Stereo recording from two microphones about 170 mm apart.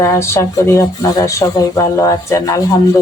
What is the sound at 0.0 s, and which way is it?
Speech, 15° left (ahead or behind).